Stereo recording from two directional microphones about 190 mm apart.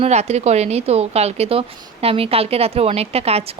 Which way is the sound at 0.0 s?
35° right (ahead or behind).